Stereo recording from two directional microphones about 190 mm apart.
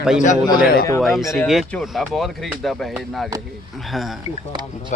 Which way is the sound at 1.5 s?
Centre (ahead or behind).